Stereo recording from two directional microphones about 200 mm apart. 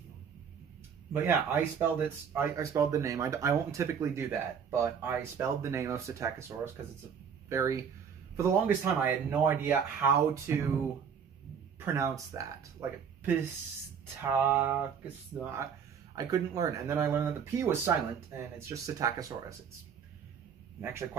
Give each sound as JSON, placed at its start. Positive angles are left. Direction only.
{"t": 1.1, "sound": "speech", "side_deg": -10}
{"t": 11.8, "sound": "speech", "side_deg": -15}
{"t": 14.2, "sound": "speech", "side_deg": -10}
{"t": 16.2, "sound": "speech", "side_deg": -20}
{"t": 20.8, "sound": "speech", "side_deg": -10}